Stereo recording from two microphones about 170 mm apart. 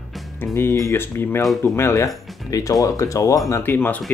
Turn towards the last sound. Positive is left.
turn(degrees=10)  # may be behind; listen again after turning